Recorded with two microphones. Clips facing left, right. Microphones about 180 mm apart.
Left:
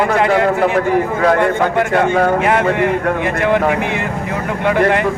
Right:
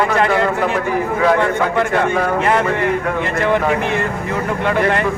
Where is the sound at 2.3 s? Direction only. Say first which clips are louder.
Left 2 dB; 10° left (ahead or behind).